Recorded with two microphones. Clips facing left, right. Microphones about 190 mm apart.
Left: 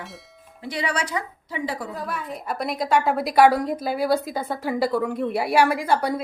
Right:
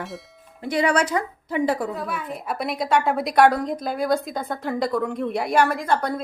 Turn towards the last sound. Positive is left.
turn(degrees=10)  # may be behind; listen again after turning